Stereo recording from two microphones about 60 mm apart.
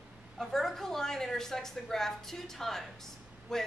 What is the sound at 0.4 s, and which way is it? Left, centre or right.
A woman's voice, centre.